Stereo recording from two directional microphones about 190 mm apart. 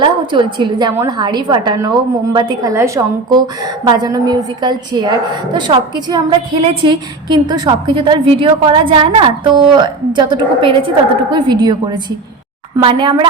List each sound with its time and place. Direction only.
0.0 s a woman's voice: 25° right (ahead or behind)